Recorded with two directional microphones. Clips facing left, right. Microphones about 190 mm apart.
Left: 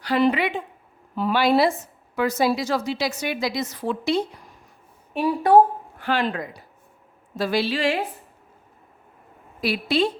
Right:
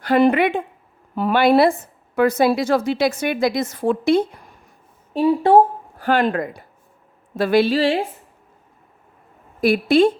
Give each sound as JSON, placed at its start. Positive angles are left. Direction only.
{"t": 0.0, "sound": "a woman's voice", "side_deg": -50}
{"t": 5.1, "sound": "speech", "side_deg": -25}
{"t": 6.0, "sound": "a woman's voice", "side_deg": -50}
{"t": 7.8, "sound": "a woman's voice", "side_deg": -30}
{"t": 9.6, "sound": "a woman's voice", "side_deg": -50}